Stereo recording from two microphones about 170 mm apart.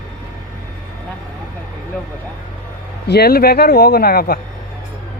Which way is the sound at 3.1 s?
70° left (ahead or behind).